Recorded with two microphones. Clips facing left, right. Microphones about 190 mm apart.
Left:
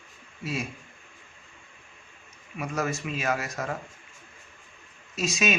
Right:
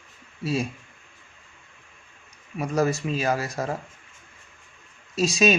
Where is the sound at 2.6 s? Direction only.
35° right (ahead or behind).